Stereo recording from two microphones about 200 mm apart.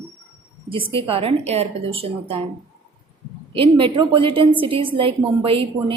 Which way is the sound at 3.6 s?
25° right (ahead or behind).